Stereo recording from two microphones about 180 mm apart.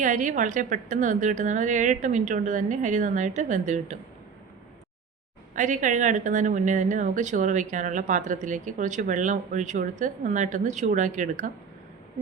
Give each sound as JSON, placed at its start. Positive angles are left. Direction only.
{"t": 0.0, "sound": "a woman's voice", "side_deg": -45}
{"t": 5.5, "sound": "a woman's voice", "side_deg": -45}